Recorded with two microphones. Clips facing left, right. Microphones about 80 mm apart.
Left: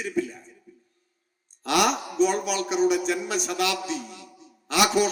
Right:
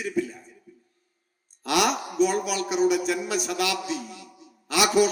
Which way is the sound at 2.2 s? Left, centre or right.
Left.